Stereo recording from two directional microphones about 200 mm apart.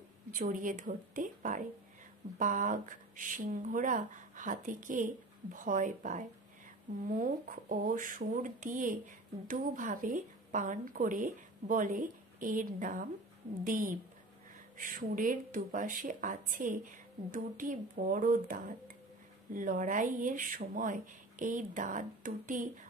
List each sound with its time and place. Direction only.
0.3 s speech: 40° right (ahead or behind)